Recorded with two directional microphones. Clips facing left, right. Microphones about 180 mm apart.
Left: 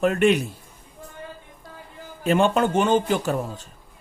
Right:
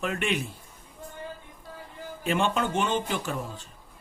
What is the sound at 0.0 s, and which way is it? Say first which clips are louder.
Speech: left 10 dB; 45° left (ahead or behind).